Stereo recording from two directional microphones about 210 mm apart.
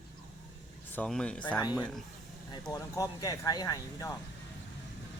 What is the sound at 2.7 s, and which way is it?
Speech, 15° left (ahead or behind).